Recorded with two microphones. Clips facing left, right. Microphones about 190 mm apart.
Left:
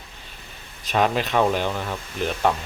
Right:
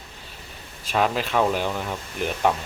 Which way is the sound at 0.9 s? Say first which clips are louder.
Left 1 dB; centre (ahead or behind).